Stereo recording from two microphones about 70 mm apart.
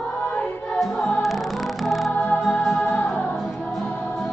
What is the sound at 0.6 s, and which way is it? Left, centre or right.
Music, centre.